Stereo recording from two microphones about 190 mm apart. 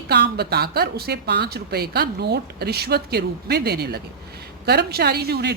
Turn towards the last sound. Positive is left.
turn(degrees=-55)  # may be behind; listen again after turning